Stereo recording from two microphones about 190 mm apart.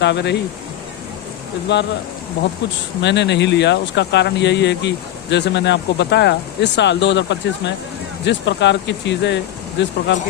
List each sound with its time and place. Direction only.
0.0 s speech: 65° left (ahead or behind)
1.7 s speech: 65° left (ahead or behind)
3.0 s speech: 65° left (ahead or behind)